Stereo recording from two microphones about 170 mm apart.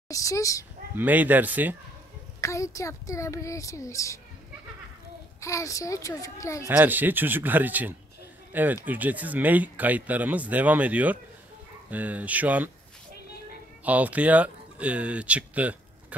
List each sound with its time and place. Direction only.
0.1 s a child's voice: 20° left (ahead or behind)
0.9 s speech: 10° right (ahead or behind)
2.4 s a child's voice: 20° left (ahead or behind)
5.4 s a child's voice: 20° left (ahead or behind)
6.7 s speech: 10° right (ahead or behind)
13.8 s speech: 10° right (ahead or behind)